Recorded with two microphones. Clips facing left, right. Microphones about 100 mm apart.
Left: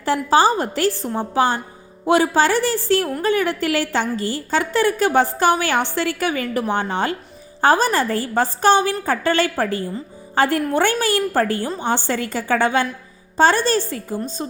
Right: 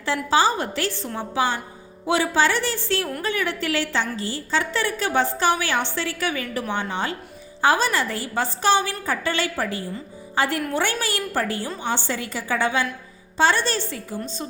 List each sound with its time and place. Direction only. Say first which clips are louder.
0.0 s a woman's voice: left 4 dB; 45° left (ahead or behind)